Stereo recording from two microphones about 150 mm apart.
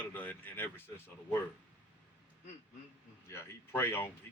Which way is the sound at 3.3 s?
15° left (ahead or behind).